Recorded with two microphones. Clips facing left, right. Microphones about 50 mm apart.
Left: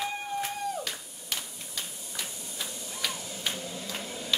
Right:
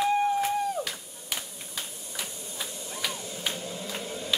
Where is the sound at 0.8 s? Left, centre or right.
Centre.